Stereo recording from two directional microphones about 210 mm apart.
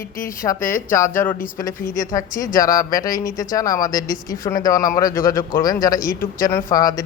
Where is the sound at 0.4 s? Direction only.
20° left (ahead or behind).